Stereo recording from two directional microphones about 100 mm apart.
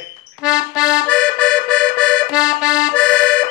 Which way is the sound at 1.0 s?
10° left (ahead or behind).